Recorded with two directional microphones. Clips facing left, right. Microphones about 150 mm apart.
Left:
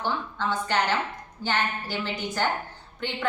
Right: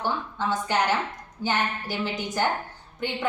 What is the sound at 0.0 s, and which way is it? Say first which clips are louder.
A woman's voice: right 1 dB; 15° right (ahead or behind).